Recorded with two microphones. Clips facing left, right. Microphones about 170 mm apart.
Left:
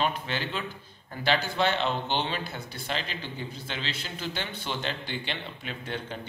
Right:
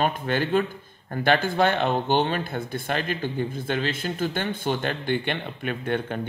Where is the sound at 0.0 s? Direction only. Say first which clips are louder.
Right 5 dB; 50° right (ahead or behind).